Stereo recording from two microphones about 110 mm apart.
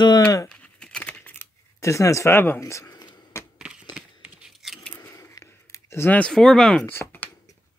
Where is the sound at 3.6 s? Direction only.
10° right (ahead or behind).